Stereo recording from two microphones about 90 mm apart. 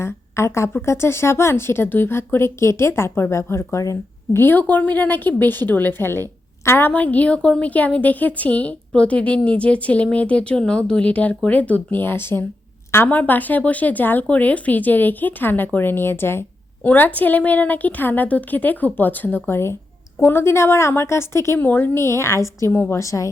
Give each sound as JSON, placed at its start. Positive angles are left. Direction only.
{"t": 0.0, "sound": "a woman's voice", "side_deg": 30}
{"t": 4.4, "sound": "a woman's voice", "side_deg": 20}